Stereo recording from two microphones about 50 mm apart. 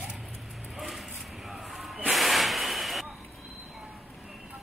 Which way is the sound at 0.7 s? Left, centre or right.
Centre.